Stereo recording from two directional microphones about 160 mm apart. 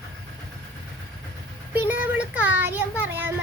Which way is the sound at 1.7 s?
10° right (ahead or behind).